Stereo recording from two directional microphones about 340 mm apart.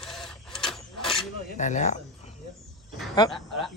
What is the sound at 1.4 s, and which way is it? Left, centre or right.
Speech, left.